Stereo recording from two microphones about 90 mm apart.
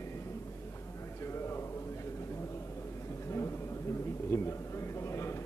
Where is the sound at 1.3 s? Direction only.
30° left (ahead or behind).